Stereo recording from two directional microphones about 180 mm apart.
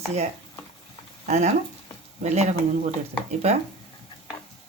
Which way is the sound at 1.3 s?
40° right (ahead or behind).